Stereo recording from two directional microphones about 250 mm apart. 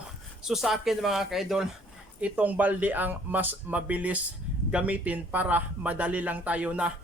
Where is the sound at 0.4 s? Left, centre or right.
Centre.